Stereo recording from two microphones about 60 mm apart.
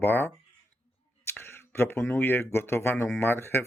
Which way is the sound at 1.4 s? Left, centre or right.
Left.